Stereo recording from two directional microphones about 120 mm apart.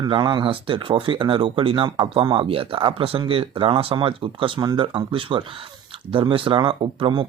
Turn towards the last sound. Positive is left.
turn(degrees=-40)  # may be behind; listen again after turning